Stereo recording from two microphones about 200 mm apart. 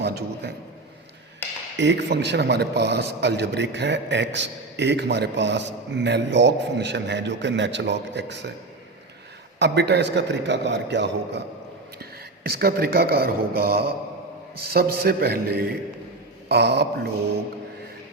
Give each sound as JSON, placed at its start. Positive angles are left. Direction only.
{"t": 0.0, "sound": "a man's voice", "side_deg": -55}
{"t": 1.8, "sound": "a man's voice", "side_deg": -60}
{"t": 9.6, "sound": "a man's voice", "side_deg": -55}